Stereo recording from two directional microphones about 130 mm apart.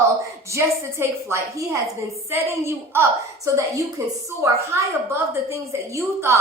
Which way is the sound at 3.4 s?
25° right (ahead or behind).